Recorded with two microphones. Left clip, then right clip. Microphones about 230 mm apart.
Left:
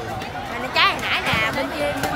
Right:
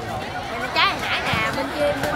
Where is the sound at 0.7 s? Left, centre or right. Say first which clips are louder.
Left 2 dB; left.